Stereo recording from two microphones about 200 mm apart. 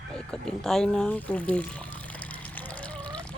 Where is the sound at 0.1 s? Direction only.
5° left (ahead or behind).